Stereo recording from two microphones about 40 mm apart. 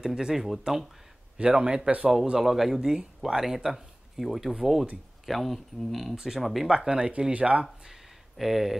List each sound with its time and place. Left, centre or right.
0.0 s speech: centre
1.4 s speech: right
2.3 s speech: centre
6.1 s speech: centre
6.4 s speech: centre
6.9 s speech: right
8.4 s speech: centre